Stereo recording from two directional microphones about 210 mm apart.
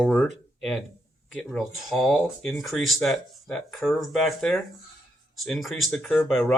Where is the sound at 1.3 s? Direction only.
Centre (ahead or behind).